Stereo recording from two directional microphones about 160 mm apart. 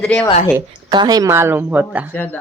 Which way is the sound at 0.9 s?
25° right (ahead or behind).